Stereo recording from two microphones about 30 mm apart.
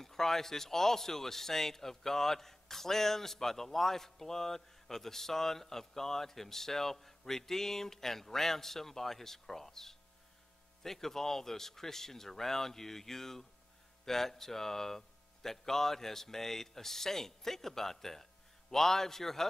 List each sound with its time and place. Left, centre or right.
0.0 s a man's voice: centre